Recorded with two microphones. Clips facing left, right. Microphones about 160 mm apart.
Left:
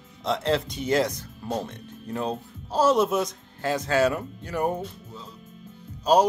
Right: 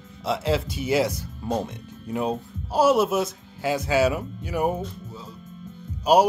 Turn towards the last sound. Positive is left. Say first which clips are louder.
# right 2 dB
turn(degrees=-10)  # may be behind; listen again after turning